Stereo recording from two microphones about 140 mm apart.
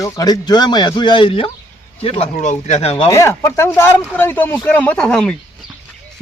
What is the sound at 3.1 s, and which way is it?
Speech, 20° left (ahead or behind).